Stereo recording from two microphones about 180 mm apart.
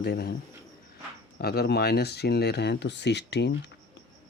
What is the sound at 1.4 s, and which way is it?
Speech, 60° left (ahead or behind).